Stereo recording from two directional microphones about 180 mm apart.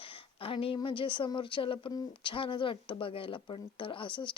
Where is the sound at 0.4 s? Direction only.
30° left (ahead or behind).